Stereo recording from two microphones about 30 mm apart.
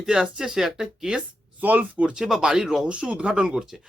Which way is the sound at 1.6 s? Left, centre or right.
Right.